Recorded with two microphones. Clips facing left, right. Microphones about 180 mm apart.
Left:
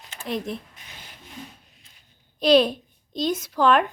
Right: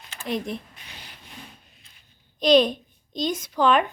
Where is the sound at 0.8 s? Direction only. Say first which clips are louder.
Right 1 dB; 45° left (ahead or behind).